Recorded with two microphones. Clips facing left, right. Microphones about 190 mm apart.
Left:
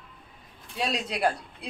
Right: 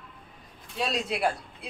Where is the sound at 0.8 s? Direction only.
Centre (ahead or behind).